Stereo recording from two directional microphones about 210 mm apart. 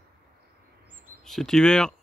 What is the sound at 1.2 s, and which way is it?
Speech, centre (ahead or behind).